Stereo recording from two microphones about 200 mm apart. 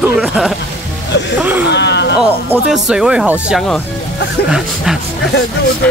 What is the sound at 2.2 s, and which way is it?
Speech, 5° right (ahead or behind).